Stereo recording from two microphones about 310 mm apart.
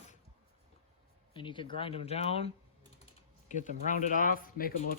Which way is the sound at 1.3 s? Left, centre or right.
Centre.